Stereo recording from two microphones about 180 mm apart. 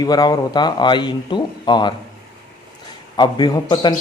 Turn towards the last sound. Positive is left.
turn(degrees=25)  # may be behind; listen again after turning